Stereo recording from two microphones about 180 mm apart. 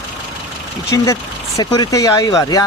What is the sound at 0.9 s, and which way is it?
Speech, 15° left (ahead or behind).